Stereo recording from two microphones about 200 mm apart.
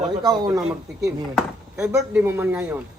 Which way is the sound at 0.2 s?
20° right (ahead or behind).